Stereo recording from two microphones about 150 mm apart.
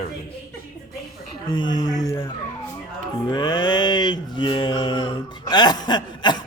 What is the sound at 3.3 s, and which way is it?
Mantra, 30° left (ahead or behind).